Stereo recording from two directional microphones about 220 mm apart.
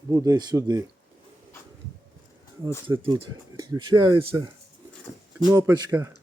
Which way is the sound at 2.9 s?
20° right (ahead or behind).